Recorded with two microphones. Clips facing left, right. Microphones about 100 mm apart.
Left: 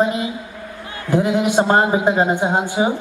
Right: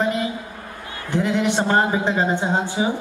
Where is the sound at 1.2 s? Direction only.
15° left (ahead or behind).